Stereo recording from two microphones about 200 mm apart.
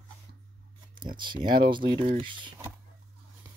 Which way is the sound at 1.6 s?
25° right (ahead or behind).